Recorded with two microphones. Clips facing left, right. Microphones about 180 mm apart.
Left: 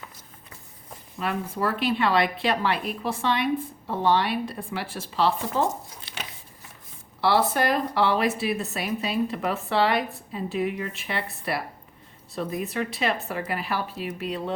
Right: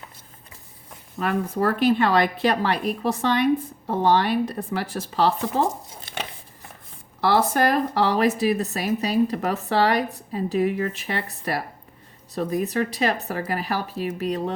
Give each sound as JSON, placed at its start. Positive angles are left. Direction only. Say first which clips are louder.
{"t": 1.2, "sound": "speech", "louder": "right 4 dB", "side_deg": -45}
{"t": 7.2, "sound": "speech", "louder": "right 2 dB", "side_deg": -45}